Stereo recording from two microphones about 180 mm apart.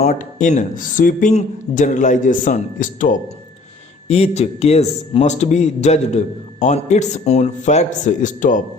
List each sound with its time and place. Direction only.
0.0 s speech: 45° left (ahead or behind)
4.1 s a man's voice: 35° left (ahead or behind)